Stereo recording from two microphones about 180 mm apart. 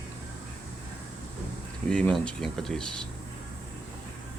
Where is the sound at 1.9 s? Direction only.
5° left (ahead or behind).